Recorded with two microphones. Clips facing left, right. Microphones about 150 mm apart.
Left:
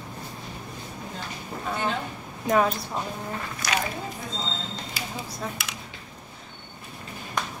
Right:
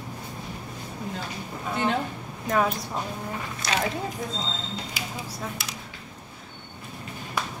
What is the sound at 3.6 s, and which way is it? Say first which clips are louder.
Speech: even; 25° right (ahead or behind).